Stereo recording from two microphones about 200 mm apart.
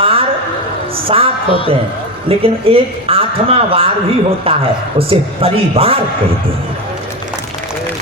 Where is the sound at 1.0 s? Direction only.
30° right (ahead or behind).